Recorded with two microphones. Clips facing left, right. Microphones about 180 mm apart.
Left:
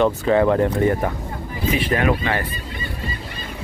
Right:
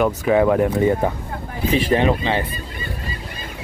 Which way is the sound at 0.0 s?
10° right (ahead or behind).